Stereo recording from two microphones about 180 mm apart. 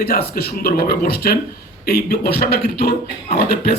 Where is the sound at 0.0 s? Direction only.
60° left (ahead or behind).